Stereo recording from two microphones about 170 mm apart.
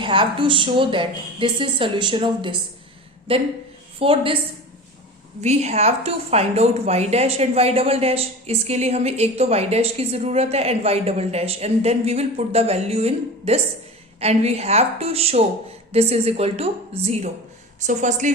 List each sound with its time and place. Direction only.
0.0 s a woman's voice: 30° right (ahead or behind)
5.4 s a woman's voice: 40° right (ahead or behind)